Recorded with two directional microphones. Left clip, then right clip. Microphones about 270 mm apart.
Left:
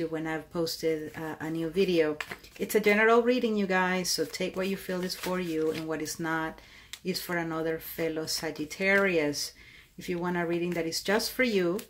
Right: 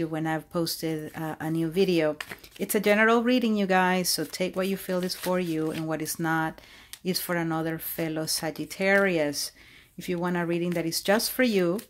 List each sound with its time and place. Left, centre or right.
0.0 s speech: right